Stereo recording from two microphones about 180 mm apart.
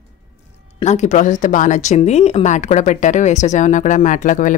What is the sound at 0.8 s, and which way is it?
Speech, 40° left (ahead or behind).